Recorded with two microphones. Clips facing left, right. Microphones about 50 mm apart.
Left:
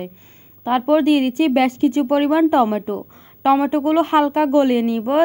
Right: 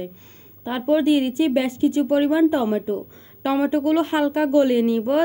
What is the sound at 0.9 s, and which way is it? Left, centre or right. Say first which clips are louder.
Speech: left 2 dB; left.